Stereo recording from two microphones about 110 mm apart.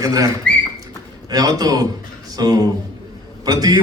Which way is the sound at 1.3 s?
35° right (ahead or behind).